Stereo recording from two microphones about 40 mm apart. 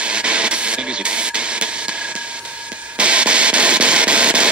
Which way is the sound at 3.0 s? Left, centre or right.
Right.